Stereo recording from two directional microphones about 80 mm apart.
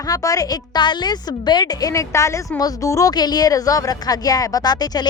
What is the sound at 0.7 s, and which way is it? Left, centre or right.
A woman's voice, left.